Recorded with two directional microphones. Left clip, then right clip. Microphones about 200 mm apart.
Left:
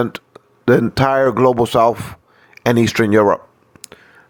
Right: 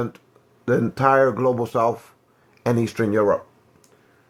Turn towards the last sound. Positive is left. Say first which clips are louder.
# left 6 dB
turn(degrees=45)  # may be behind; listen again after turning